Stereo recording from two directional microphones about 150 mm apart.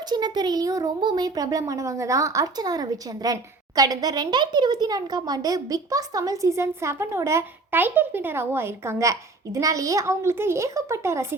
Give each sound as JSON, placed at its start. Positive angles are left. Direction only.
{"t": 0.1, "sound": "speech", "side_deg": -25}